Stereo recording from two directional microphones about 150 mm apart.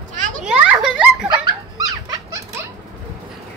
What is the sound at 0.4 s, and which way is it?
Children playing, 5° right (ahead or behind).